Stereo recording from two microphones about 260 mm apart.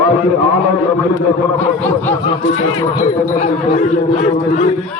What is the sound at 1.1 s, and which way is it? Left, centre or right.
Speech, centre.